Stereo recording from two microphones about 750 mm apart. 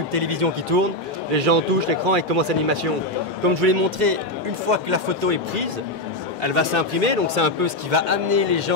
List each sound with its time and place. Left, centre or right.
0.1 s speech: right
1.3 s speech: right
7.0 s speech: right